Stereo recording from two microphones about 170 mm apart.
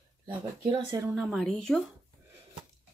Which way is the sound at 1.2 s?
Centre (ahead or behind).